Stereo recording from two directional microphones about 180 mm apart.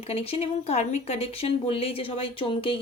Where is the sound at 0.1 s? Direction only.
35° left (ahead or behind).